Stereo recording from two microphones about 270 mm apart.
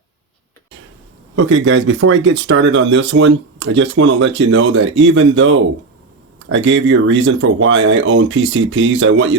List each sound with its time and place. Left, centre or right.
1.4 s speech: right